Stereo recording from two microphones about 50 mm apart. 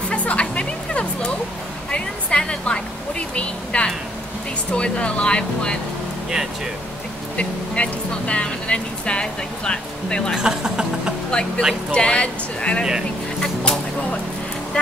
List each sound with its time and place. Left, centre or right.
0.1 s music: left
1.9 s a sound: left
4.7 s speech: left
7.3 s speech: left
10.3 s speech: centre
11.2 s speech: centre